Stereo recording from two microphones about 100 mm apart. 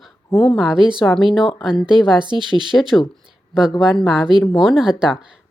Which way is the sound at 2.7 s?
Centre (ahead or behind).